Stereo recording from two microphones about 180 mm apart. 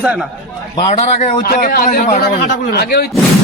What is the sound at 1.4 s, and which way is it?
Speech, 55° left (ahead or behind).